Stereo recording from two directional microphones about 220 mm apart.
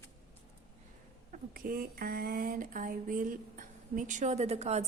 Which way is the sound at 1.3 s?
40° right (ahead or behind).